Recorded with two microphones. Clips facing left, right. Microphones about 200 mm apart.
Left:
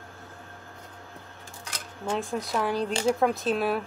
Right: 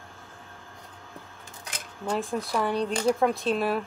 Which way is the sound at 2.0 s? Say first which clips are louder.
Right 1 dB; centre (ahead or behind).